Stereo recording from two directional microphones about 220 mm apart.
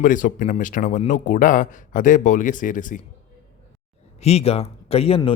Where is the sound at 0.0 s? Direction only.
35° left (ahead or behind).